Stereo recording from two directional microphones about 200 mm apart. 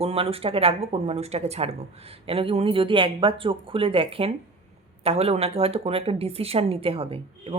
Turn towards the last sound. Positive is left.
turn(degrees=-30)  # may be behind; listen again after turning